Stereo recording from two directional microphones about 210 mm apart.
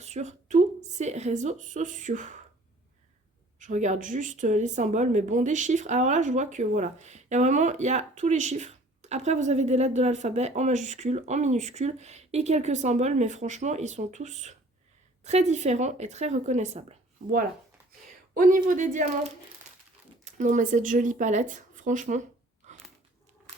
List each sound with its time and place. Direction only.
0.0 s a woman's voice: 30° right (ahead or behind)
3.6 s a woman's voice: 35° right (ahead or behind)
18.3 s a woman's voice: 40° right (ahead or behind)
22.6 s biting: 35° right (ahead or behind)